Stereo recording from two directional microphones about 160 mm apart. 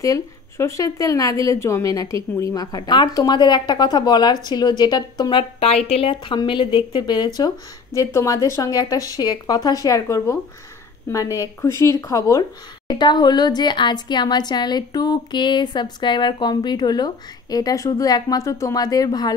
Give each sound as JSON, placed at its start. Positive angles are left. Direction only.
{"t": 0.0, "sound": "a woman's voice", "side_deg": 20}